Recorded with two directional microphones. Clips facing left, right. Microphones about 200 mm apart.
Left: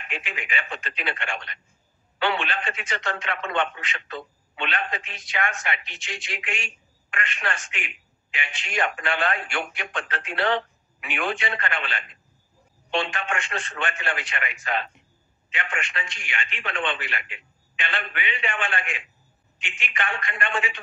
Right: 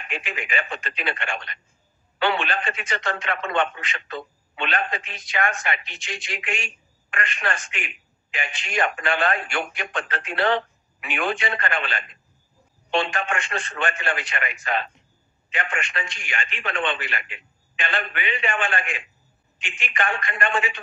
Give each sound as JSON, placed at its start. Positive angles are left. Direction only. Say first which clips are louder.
{"t": 0.1, "sound": "speech", "louder": "right 3 dB", "side_deg": -40}